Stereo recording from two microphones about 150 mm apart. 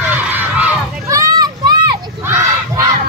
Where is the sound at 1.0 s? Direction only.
20° right (ahead or behind).